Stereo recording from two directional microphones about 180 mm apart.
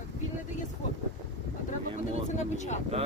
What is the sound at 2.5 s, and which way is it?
Speech, 40° left (ahead or behind).